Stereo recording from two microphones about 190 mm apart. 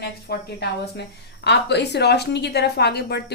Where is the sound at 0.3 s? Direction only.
60° left (ahead or behind).